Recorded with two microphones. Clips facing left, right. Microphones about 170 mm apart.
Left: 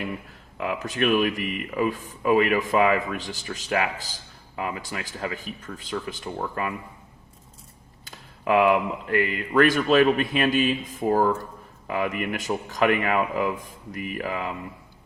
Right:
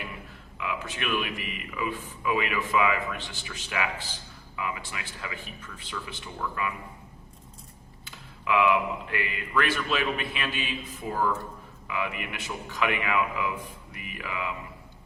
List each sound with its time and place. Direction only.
0.6 s speech: 40° left (ahead or behind)
8.0 s speech: 40° left (ahead or behind)